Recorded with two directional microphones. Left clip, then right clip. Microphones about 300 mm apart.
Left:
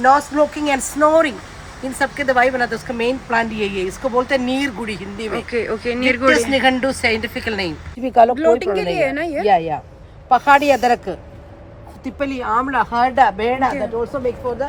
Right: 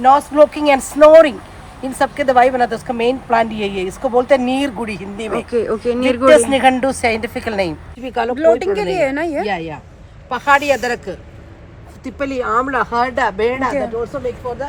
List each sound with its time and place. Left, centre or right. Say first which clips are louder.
0.2 s speech: right 6 dB; centre
5.5 s speech: right 4 dB; centre
6.3 s speech: right 5 dB; right
8.0 s speech: left 7 dB; left
8.4 s speech: right 2 dB; centre
9.5 s speech: left 7 dB; left
12.0 s speech: right 2 dB; centre